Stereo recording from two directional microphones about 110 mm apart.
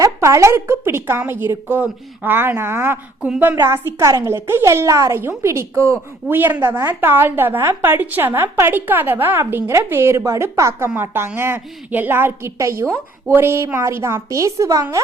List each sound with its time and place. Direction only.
0.0 s a woman's voice: 30° right (ahead or behind)
3.2 s a woman's voice: 10° right (ahead or behind)
3.6 s a woman's voice: 25° right (ahead or behind)